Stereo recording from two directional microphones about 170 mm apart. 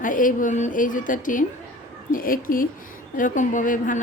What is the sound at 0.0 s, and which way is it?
A woman's voice, 50° left (ahead or behind).